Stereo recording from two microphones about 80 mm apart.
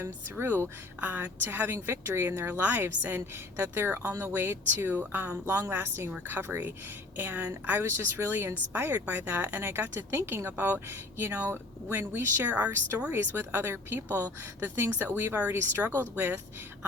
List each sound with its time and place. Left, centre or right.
0.0 s a woman's voice: right